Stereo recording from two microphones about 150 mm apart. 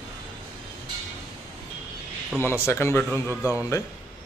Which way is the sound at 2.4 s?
15° left (ahead or behind).